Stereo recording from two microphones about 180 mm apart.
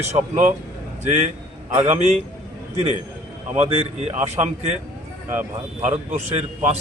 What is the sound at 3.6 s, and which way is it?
Speech, 40° right (ahead or behind).